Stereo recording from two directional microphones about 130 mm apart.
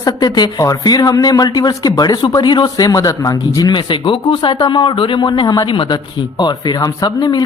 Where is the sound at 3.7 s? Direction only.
40° left (ahead or behind).